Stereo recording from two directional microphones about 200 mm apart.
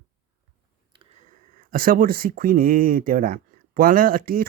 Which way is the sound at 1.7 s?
45° right (ahead or behind).